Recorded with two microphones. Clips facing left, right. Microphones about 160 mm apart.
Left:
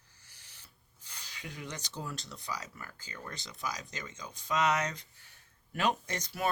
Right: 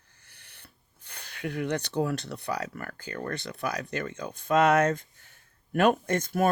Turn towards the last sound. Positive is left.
turn(degrees=-50)  # may be behind; listen again after turning